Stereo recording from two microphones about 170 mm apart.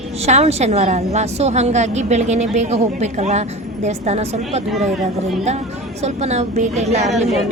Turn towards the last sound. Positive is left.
turn(degrees=0)  # may be behind; listen again after turning